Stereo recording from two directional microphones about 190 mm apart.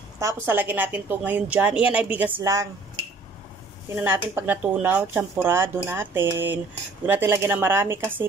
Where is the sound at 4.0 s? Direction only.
10° right (ahead or behind).